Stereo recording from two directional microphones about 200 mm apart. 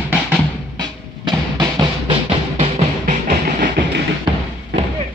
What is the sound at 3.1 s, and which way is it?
Train, 40° right (ahead or behind).